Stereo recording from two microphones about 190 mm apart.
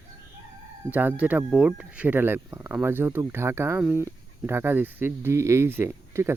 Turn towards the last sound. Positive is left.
turn(degrees=-10)  # may be behind; listen again after turning